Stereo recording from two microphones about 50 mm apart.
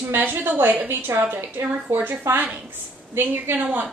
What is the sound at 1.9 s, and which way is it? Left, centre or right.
A woman's voice, right.